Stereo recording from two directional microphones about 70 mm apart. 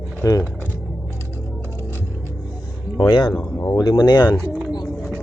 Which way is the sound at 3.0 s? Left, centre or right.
Left.